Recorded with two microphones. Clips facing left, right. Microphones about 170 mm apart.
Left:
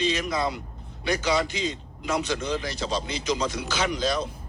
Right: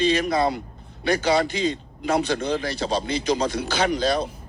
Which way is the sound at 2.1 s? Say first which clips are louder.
Right 4 dB; 60° right (ahead or behind).